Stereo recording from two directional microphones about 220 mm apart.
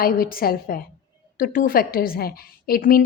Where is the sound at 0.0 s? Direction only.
40° left (ahead or behind).